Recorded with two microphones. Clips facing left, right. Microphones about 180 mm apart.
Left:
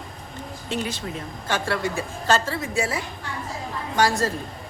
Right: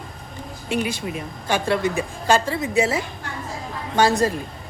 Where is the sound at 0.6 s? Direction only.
10° right (ahead or behind).